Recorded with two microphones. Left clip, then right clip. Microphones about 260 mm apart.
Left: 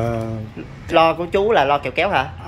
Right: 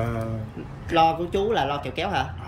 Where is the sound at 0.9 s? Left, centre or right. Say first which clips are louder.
Left 5 dB; centre.